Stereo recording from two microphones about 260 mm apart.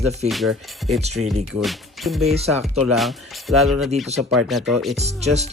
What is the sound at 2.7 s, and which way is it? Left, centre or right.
Speech, centre.